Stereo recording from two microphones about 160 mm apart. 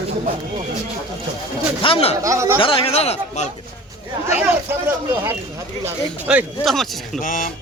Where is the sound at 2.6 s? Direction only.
35° left (ahead or behind).